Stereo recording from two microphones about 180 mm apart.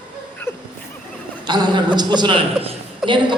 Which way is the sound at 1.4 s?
25° right (ahead or behind).